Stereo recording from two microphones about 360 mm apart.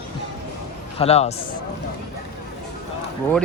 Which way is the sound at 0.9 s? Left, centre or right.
Centre.